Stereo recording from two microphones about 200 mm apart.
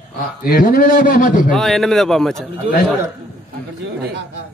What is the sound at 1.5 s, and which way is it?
Speech, centre (ahead or behind).